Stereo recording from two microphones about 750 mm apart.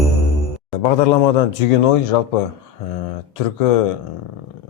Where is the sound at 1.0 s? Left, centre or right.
Left.